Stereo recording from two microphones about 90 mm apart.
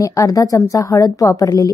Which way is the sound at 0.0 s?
35° left (ahead or behind).